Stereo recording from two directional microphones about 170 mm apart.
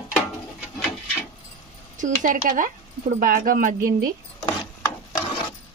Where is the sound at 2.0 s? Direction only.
50° right (ahead or behind).